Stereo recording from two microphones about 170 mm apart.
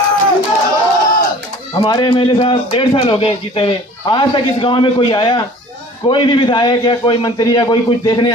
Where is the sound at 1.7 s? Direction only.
25° left (ahead or behind).